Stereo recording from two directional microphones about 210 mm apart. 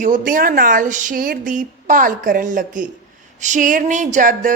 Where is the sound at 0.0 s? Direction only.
40° right (ahead or behind).